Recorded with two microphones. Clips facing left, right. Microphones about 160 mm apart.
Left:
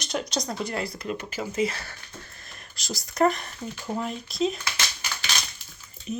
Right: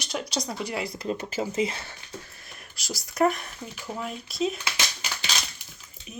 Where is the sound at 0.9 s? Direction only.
25° right (ahead or behind).